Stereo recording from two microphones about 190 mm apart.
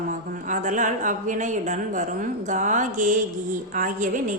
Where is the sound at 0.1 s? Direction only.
40° right (ahead or behind).